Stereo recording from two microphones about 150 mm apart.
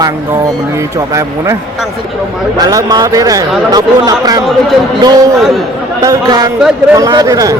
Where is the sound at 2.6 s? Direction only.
25° right (ahead or behind).